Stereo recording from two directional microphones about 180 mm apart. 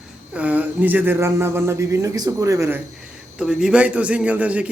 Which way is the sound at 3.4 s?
5° right (ahead or behind).